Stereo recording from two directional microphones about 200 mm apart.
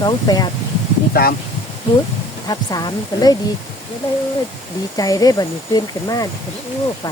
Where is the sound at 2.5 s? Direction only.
20° left (ahead or behind).